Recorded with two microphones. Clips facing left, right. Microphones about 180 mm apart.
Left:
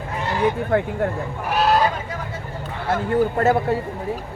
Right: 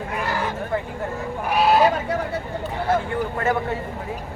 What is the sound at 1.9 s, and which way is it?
Speech, 70° right (ahead or behind).